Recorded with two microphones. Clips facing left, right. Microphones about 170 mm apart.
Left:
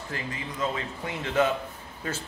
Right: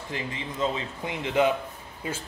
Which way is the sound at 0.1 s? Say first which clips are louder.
Right 2 dB; 20° right (ahead or behind).